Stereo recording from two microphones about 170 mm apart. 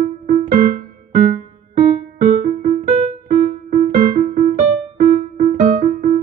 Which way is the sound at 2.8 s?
45° right (ahead or behind).